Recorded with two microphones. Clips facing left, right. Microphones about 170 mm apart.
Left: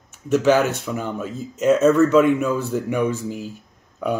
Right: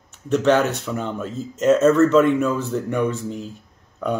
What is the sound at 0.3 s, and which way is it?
Speech, 5° left (ahead or behind).